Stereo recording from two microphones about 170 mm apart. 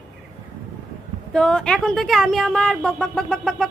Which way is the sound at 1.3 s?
5° left (ahead or behind).